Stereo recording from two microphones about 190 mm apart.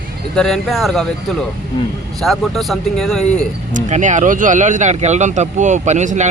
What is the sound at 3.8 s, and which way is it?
Speech, 40° right (ahead or behind).